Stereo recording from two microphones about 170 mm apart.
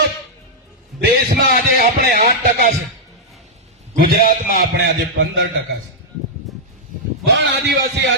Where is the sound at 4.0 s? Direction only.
55° right (ahead or behind); by 5.5 s 75° right (ahead or behind).